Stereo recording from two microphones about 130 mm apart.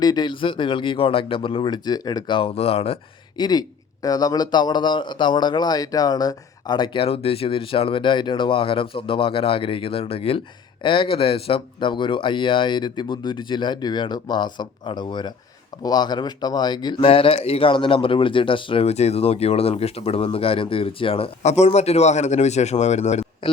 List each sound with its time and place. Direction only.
0.0 s a man's voice: 35° left (ahead or behind)
2.5 s speech: 50° left (ahead or behind)
3.3 s a man's voice: 35° left (ahead or behind); by 23.2 s 60° left (ahead or behind)